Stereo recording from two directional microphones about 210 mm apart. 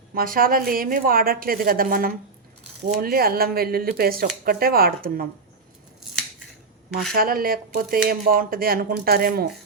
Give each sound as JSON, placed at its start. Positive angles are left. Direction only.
{"t": 0.1, "sound": "speech", "side_deg": -45}
{"t": 7.1, "sound": "speech", "side_deg": -45}